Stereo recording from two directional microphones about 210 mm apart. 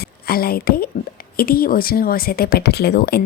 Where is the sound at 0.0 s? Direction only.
45° left (ahead or behind).